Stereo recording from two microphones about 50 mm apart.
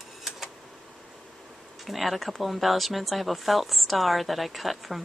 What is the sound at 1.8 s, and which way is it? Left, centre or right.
Speech, centre.